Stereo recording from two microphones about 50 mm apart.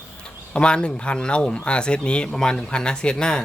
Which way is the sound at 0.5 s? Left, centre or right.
Centre.